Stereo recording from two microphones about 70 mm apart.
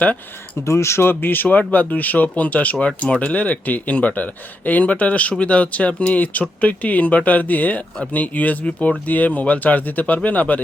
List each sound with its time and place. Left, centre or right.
0.6 s speech: left